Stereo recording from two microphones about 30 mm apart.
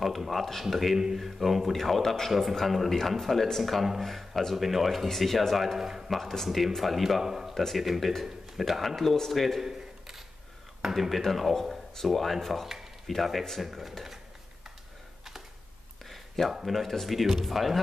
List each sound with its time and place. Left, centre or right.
0.2 s speech: centre
0.9 s speech: centre
1.2 s speech: centre
5.8 s speech: centre
6.0 s speech: centre
7.5 s speech: centre
8.8 s speech: centre
9.4 s speech: centre
9.7 s a sound: centre
10.9 s speech: centre
16.6 s speech: centre